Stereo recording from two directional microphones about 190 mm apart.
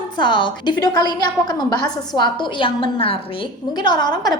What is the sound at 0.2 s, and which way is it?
A woman's voice, 25° left (ahead or behind).